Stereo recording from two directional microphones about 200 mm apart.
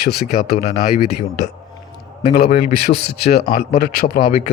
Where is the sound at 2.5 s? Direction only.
50° left (ahead or behind).